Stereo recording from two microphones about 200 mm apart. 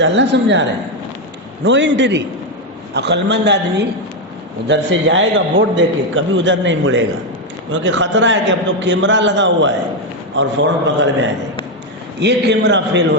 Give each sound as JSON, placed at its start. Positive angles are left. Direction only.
{"t": 0.0, "sound": "a man's voice", "side_deg": -65}
{"t": 1.6, "sound": "a man's voice", "side_deg": -65}